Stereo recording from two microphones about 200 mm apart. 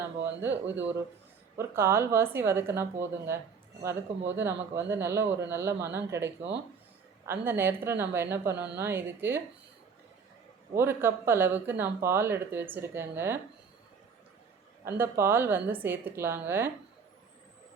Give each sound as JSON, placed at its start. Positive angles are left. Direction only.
{"t": 0.4, "sound": "a woman's voice", "side_deg": -10}
{"t": 10.8, "sound": "a woman's voice", "side_deg": -10}
{"t": 14.8, "sound": "a woman's voice", "side_deg": -10}